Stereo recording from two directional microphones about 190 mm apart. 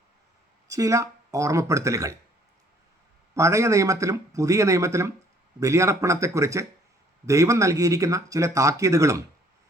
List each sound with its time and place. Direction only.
0.7 s speech: 15° right (ahead or behind)
3.3 s speech: 15° right (ahead or behind)